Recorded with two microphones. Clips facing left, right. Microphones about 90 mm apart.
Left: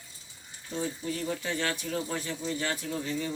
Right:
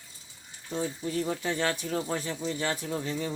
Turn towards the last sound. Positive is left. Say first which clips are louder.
# right 1 dB
turn(degrees=-30)  # may be behind; listen again after turning